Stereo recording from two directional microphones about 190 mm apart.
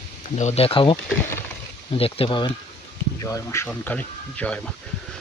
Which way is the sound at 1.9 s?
30° left (ahead or behind).